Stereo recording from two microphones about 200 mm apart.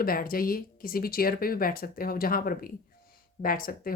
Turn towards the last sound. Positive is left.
turn(degrees=45)  # may be behind; listen again after turning